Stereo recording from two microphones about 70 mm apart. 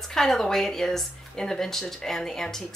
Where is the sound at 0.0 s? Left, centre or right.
Centre.